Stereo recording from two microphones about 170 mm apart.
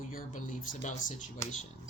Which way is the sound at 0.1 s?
50° left (ahead or behind).